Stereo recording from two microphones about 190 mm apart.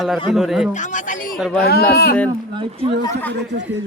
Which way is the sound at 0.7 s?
40° left (ahead or behind).